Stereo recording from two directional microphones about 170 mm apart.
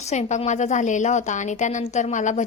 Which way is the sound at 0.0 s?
40° left (ahead or behind).